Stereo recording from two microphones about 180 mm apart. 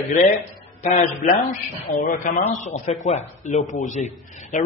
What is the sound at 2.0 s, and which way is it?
A man's voice, 45° left (ahead or behind).